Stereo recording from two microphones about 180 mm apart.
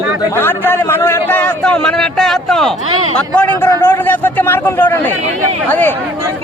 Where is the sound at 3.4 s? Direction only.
10° left (ahead or behind).